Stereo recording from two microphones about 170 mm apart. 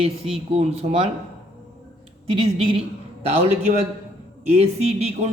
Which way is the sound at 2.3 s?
30° right (ahead or behind).